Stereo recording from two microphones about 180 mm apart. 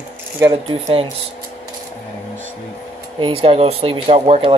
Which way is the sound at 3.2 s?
30° right (ahead or behind).